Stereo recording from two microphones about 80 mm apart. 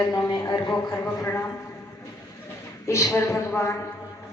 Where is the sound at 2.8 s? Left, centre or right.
Left.